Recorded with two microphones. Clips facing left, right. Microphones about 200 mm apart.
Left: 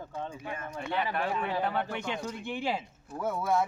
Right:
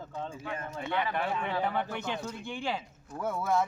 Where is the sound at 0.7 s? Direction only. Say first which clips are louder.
Even; 25° right (ahead or behind).